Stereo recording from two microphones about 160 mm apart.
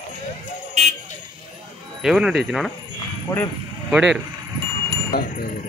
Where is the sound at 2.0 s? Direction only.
5° right (ahead or behind).